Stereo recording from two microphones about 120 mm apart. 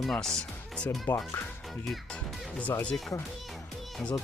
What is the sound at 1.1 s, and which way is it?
Speech, 15° left (ahead or behind).